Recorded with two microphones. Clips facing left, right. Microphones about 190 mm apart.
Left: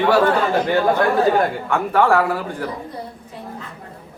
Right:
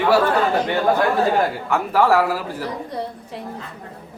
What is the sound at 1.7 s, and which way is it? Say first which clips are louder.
Speech: even; 5° right (ahead or behind).